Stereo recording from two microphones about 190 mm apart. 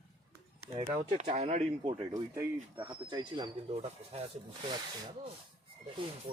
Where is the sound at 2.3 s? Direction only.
20° right (ahead or behind).